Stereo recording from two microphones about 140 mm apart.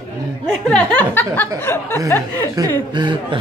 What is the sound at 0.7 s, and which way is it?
A woman's voice, 10° left (ahead or behind).